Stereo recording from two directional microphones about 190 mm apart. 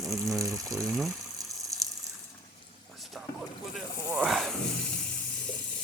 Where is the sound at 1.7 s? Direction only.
15° right (ahead or behind).